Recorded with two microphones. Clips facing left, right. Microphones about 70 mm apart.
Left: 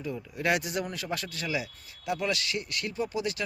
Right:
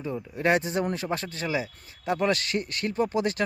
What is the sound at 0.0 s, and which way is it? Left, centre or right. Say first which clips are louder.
Speech: right 4 dB; right.